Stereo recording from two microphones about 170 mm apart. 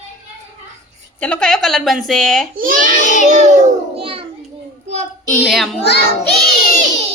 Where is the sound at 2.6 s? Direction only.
50° right (ahead or behind).